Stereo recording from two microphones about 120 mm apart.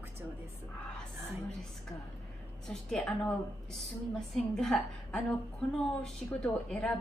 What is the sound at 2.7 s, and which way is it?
Speech, 5° left (ahead or behind).